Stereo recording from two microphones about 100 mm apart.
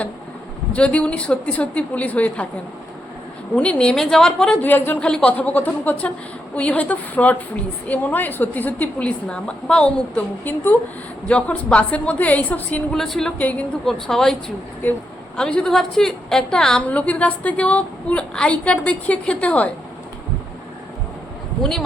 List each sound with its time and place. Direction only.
0.7 s a woman's voice: 15° left (ahead or behind)
3.5 s a woman's voice: 10° left (ahead or behind)
13.0 s speech: 5° left (ahead or behind)
13.4 s a woman's voice: 15° left (ahead or behind)
21.6 s speech: centre (ahead or behind)